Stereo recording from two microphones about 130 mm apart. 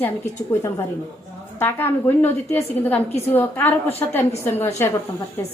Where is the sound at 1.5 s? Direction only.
15° left (ahead or behind).